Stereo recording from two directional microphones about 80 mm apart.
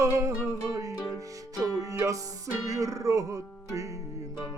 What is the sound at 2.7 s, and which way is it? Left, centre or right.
Music, right.